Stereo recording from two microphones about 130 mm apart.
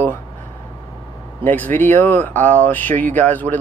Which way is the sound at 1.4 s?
15° left (ahead or behind).